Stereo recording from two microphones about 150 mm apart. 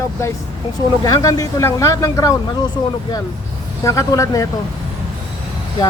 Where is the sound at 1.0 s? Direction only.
25° left (ahead or behind).